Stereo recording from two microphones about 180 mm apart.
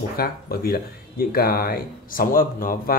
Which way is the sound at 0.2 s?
55° left (ahead or behind).